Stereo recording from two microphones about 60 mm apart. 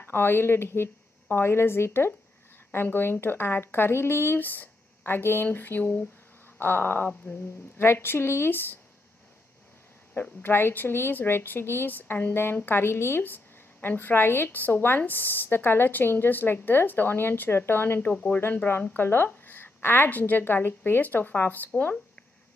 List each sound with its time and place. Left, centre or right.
0.0 s a woman's voice: left
10.4 s a woman's voice: left